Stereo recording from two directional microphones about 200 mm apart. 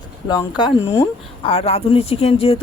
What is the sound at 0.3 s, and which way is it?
Speech, 20° left (ahead or behind).